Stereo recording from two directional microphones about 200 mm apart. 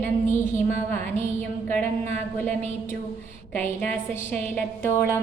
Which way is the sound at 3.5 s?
10° left (ahead or behind).